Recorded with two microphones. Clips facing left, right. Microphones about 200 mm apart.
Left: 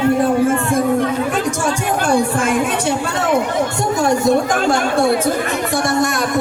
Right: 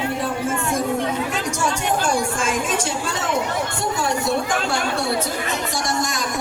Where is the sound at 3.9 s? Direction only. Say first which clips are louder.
Left 8 dB; 45° left (ahead or behind).